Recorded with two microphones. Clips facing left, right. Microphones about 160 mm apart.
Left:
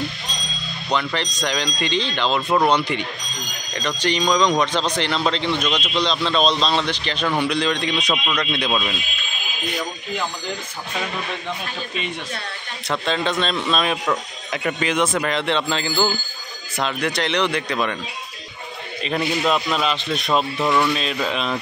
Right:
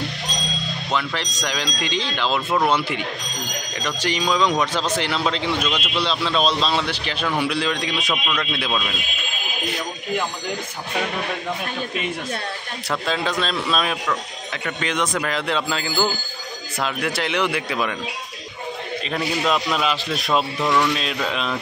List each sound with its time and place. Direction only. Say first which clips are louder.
0.9 s a man's voice: left 3 dB; 5° right (ahead or behind)
12.9 s a man's voice: left 1 dB; 5° right (ahead or behind)
14.0 s speech: left 2 dB; 20° left (ahead or behind)
14.8 s a man's voice: left 2 dB; 5° left (ahead or behind)
19.0 s a man's voice: left 2 dB; centre (ahead or behind)